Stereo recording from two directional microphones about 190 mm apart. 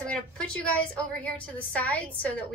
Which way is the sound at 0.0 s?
5° left (ahead or behind).